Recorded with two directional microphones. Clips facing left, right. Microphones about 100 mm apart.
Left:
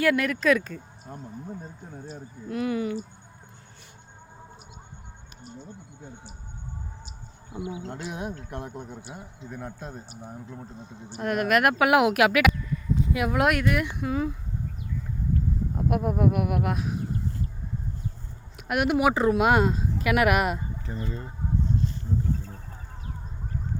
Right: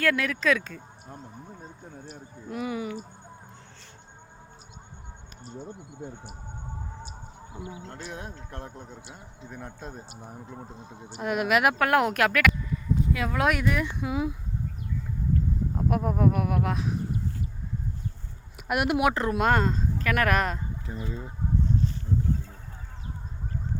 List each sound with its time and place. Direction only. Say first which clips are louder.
0.0 s speech: left 3 dB; 5° left (ahead or behind)
7.9 s speech: left 5 dB; 15° left (ahead or behind)
9.5 s speech: left 2 dB; 5° left (ahead or behind)
11.2 s speech: left 1 dB; 5° right (ahead or behind)
11.8 s speech: left 3 dB; 10° left (ahead or behind)
14.0 s speech: left 1 dB; 5° right (ahead or behind)
15.7 s speech: left 1 dB; centre (ahead or behind)
18.5 s speech: left 2 dB; centre (ahead or behind)
20.8 s speech: left 1 dB; 5° right (ahead or behind)